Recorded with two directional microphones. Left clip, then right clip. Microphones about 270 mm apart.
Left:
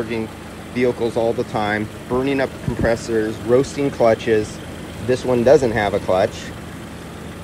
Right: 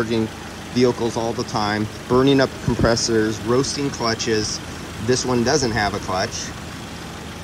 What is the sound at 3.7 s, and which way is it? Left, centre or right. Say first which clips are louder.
Speech: left 7 dB; centre.